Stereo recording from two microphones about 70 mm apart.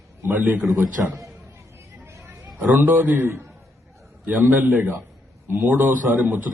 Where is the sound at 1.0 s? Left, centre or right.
Centre.